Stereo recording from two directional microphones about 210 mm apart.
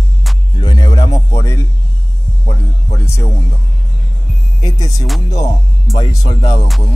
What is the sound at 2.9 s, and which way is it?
Speech, 15° left (ahead or behind).